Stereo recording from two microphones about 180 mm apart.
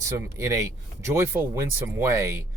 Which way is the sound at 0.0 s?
15° right (ahead or behind).